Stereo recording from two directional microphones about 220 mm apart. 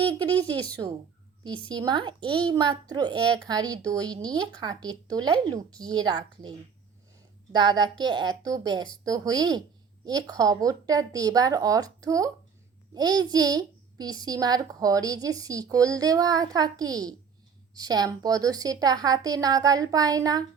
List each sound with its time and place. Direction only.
0.0 s speech: 5° left (ahead or behind)
0.7 s a woman's voice: 20° right (ahead or behind)
7.5 s a woman's voice: 20° right (ahead or behind)